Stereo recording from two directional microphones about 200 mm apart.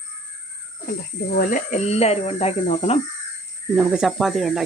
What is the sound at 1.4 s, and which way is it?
Speech, 40° left (ahead or behind).